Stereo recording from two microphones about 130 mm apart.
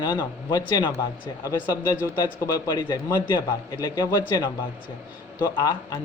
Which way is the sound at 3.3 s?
35° left (ahead or behind).